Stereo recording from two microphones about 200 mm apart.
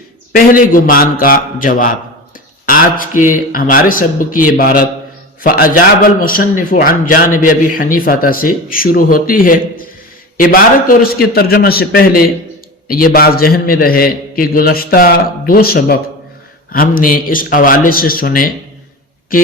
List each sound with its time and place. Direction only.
0.3 s a man's voice: 45° left (ahead or behind)